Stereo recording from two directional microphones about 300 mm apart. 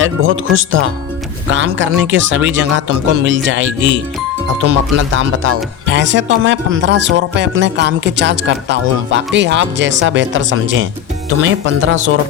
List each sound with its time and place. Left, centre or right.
0.0 s speech: right